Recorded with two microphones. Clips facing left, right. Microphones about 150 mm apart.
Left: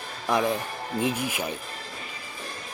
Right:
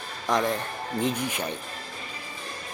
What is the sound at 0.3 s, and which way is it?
Speech, 10° left (ahead or behind).